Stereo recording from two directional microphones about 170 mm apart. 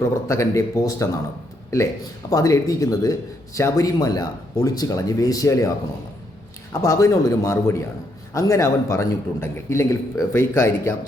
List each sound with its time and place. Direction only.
0.0 s a man's voice: 15° left (ahead or behind)
2.3 s speech: 20° left (ahead or behind)
6.8 s a man's voice: 15° left (ahead or behind)